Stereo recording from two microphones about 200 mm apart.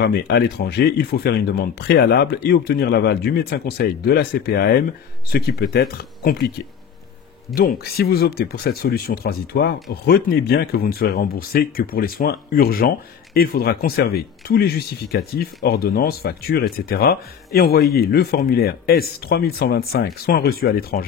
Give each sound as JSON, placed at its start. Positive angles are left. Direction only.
{"t": 0.0, "sound": "speech", "side_deg": 55}
{"t": 7.5, "sound": "speech", "side_deg": 50}